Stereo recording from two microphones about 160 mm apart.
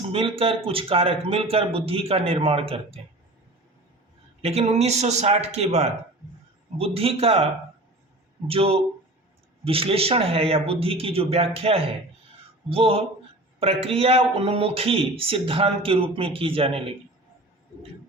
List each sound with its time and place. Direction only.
0.1 s speech: 35° right (ahead or behind)
4.4 s speech: 40° right (ahead or behind)
8.4 s speech: 35° right (ahead or behind)